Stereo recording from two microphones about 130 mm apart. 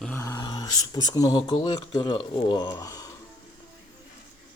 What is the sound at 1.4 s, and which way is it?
Speech, 40° left (ahead or behind).